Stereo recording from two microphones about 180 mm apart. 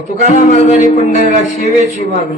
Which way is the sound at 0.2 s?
40° left (ahead or behind).